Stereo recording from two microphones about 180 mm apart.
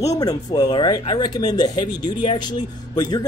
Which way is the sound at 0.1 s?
20° left (ahead or behind).